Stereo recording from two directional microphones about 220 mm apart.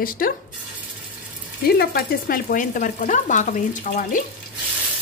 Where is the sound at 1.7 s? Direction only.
45° left (ahead or behind).